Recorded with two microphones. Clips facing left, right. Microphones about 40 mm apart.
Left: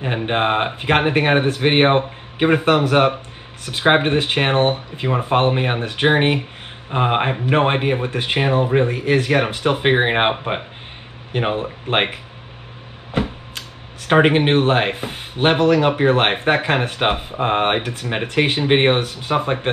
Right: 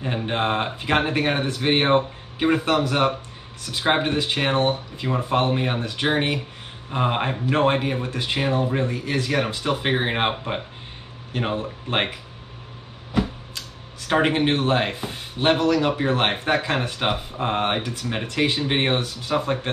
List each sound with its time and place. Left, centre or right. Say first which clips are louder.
0.0 s speech: left 5 dB; left